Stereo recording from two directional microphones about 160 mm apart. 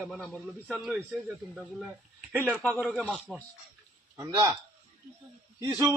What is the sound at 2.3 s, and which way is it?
Speech, 10° right (ahead or behind).